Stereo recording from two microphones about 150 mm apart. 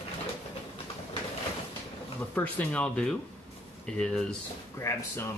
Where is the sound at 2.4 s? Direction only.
10° left (ahead or behind).